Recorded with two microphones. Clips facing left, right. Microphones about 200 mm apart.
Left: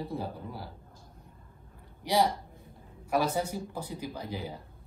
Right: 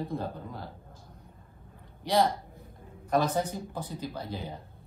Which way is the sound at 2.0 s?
10° left (ahead or behind).